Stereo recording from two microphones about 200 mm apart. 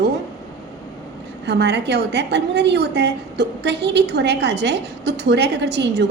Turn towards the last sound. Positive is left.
turn(degrees=-60)  # may be behind; listen again after turning